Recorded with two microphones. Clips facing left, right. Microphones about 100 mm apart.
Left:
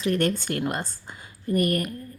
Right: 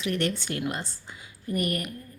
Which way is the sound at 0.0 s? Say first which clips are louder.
Left 4 dB; 40° left (ahead or behind).